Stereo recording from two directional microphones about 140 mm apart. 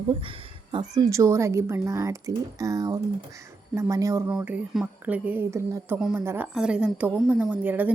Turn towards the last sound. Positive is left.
turn(degrees=-10)  # may be behind; listen again after turning